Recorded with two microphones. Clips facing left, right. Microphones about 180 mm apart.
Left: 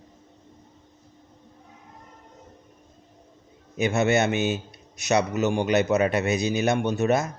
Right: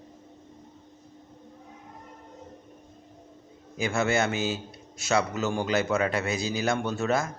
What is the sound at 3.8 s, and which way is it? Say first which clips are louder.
A man's voice: left 4 dB; 20° left (ahead or behind).